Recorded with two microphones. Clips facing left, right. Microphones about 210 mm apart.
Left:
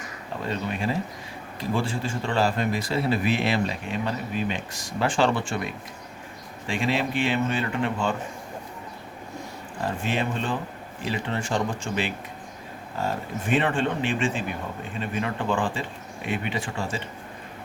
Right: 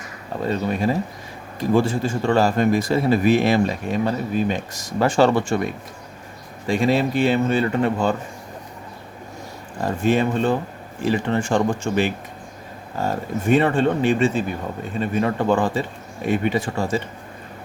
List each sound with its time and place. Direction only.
0.4 s speech: 40° right (ahead or behind)
9.8 s speech: 40° right (ahead or behind)